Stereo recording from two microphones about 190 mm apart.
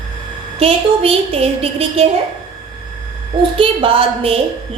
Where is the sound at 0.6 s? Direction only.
30° right (ahead or behind).